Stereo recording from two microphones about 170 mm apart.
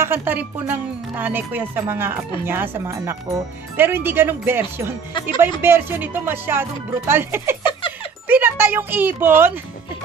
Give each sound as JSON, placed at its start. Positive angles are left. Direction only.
{"t": 0.0, "sound": "speech", "side_deg": -15}
{"t": 7.6, "sound": "a sound", "side_deg": 30}
{"t": 8.3, "sound": "speech", "side_deg": -10}